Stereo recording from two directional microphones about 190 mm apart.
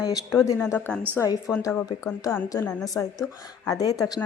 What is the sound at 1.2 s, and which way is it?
A woman's voice, 20° left (ahead or behind).